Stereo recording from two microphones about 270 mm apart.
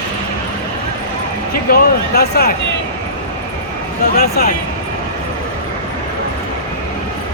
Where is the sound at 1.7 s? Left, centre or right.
Left.